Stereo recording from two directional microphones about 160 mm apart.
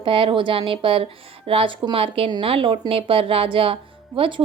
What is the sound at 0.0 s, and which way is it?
Speech, 35° right (ahead or behind).